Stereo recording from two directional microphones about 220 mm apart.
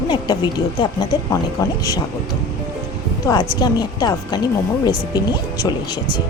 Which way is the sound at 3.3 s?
10° left (ahead or behind).